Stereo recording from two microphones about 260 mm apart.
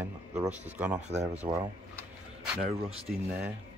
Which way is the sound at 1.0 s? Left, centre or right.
Right.